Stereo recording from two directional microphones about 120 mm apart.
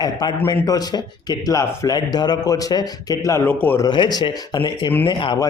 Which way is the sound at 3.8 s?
40° left (ahead or behind).